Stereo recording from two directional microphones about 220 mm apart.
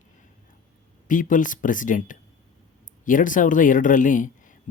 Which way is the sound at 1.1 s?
35° left (ahead or behind).